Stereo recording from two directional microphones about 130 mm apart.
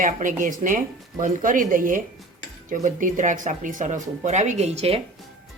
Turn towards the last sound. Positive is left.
turn(degrees=-50)  # may be behind; listen again after turning